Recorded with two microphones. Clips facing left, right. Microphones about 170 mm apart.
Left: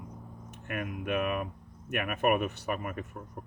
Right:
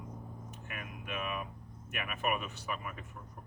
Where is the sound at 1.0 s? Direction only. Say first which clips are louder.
Left 8 dB; 60° left (ahead or behind).